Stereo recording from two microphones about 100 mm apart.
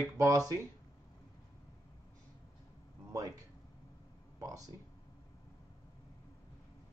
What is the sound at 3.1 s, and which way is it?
Speech, 35° right (ahead or behind).